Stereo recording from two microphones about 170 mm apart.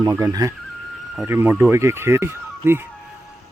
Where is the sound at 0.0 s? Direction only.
20° right (ahead or behind).